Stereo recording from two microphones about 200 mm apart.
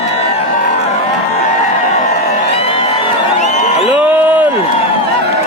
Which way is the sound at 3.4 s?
40° left (ahead or behind).